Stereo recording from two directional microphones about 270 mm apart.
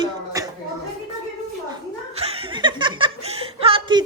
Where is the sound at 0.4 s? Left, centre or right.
Centre.